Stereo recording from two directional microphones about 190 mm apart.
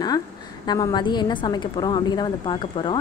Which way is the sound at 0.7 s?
20° left (ahead or behind).